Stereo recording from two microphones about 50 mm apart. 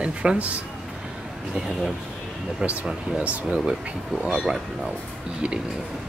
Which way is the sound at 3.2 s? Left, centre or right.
Right.